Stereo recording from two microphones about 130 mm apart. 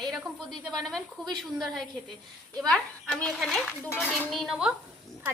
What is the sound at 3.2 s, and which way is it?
A woman's voice, 5° left (ahead or behind).